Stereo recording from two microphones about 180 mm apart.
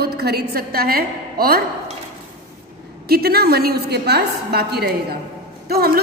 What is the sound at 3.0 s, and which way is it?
A woman's voice, 60° right (ahead or behind).